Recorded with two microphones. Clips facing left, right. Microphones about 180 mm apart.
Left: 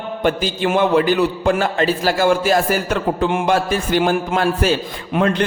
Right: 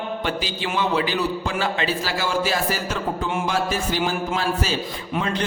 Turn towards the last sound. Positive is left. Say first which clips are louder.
# left 7 dB
turn(degrees=60)  # may be behind; listen again after turning